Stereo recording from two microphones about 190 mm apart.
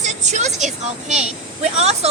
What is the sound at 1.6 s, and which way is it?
Speech, 35° right (ahead or behind).